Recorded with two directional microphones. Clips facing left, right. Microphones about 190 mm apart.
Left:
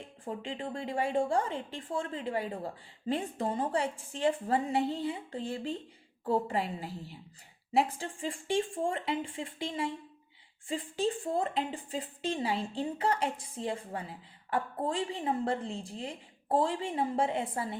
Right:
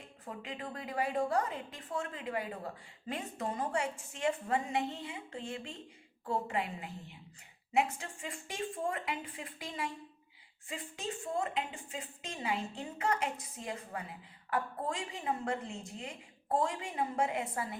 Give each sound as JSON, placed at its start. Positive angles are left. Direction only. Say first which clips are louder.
{"t": 0.3, "sound": "a woman's voice", "louder": "left 5 dB", "side_deg": 30}